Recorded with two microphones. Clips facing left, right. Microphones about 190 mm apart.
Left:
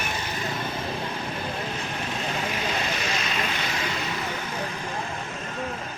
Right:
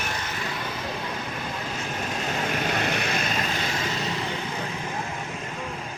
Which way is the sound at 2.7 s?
60° right (ahead or behind).